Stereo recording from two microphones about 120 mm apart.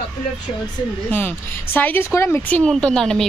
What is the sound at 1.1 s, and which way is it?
A woman's voice, 15° left (ahead or behind).